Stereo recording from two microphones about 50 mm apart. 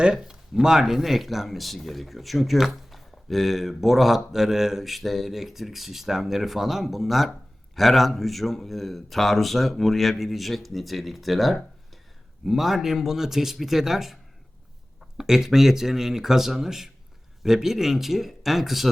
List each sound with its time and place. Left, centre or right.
0.0 s speech: centre
15.2 s speech: centre